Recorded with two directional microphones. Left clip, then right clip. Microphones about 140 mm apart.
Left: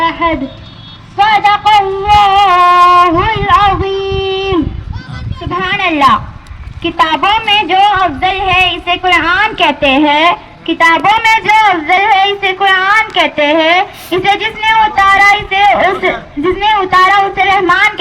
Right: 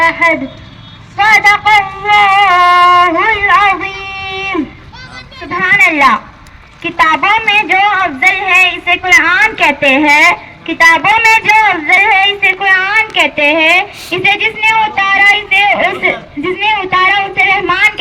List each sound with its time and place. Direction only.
0.0 s speech: 35° right (ahead or behind)
1.1 s a sound: 35° right (ahead or behind)
5.5 s a woman's voice: 35° right (ahead or behind)